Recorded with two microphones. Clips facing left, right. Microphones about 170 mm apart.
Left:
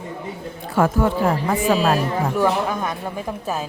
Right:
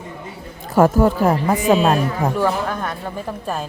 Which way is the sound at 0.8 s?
40° right (ahead or behind).